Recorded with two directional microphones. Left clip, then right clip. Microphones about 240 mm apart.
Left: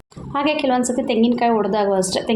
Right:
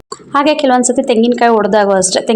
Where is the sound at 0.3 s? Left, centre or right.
Right.